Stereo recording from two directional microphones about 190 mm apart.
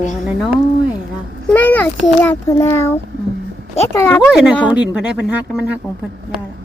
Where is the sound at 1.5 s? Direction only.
10° left (ahead or behind).